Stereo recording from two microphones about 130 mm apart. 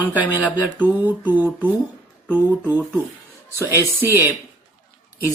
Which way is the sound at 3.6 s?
20° right (ahead or behind).